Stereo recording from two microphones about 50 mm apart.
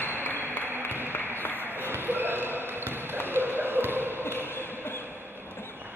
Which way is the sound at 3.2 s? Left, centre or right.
Right.